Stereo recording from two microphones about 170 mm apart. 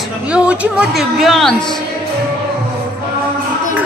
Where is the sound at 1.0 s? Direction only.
Centre (ahead or behind).